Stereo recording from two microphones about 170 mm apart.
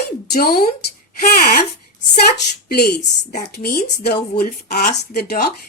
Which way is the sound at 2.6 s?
65° left (ahead or behind).